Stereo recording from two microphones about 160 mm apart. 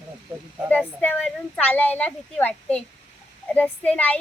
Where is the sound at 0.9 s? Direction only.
10° left (ahead or behind).